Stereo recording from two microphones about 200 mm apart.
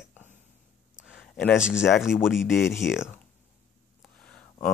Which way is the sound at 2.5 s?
15° left (ahead or behind).